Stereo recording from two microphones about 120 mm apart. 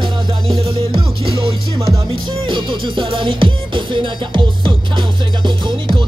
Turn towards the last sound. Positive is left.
turn(degrees=-40)  # may be behind; listen again after turning